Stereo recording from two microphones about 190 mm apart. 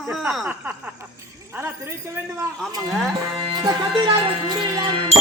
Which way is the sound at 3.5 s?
25° right (ahead or behind).